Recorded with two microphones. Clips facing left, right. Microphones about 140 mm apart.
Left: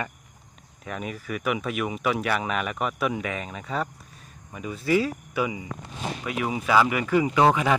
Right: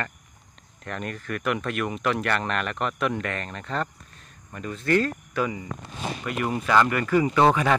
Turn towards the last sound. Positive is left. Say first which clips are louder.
# even
turn(degrees=10)  # may be behind; listen again after turning